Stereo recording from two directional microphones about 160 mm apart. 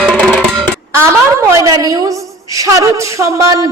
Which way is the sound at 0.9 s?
15° right (ahead or behind).